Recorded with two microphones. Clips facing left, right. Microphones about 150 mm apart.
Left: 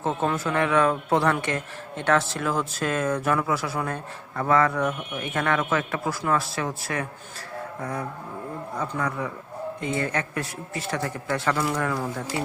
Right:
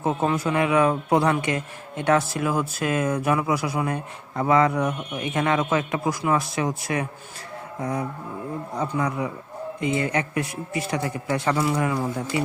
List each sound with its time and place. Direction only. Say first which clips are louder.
0.0 s a man's voice: right 2 dB; 10° right (ahead or behind)